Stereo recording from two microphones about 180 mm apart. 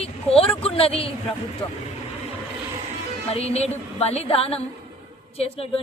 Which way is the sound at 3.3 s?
35° left (ahead or behind).